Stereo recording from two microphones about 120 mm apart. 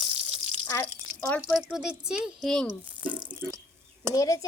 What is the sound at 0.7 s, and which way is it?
Speech, 25° left (ahead or behind).